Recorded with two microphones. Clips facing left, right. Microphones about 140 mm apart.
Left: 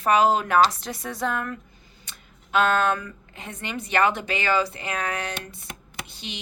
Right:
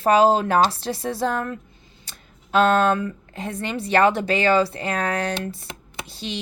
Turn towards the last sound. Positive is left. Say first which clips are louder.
# right 6 dB
turn(degrees=-35)  # may be behind; listen again after turning